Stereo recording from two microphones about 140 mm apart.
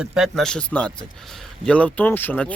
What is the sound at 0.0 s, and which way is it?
Speech, 5° right (ahead or behind).